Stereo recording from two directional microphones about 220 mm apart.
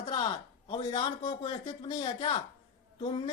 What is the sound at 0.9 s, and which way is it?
A man's voice, 20° left (ahead or behind).